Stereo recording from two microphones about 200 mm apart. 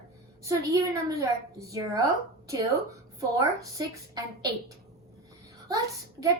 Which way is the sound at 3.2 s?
15° right (ahead or behind).